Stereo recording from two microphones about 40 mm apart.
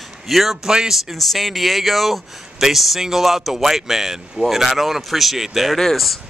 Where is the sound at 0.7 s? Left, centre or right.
Centre.